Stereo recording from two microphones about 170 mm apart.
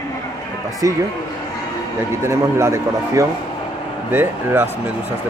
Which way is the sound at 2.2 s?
15° right (ahead or behind).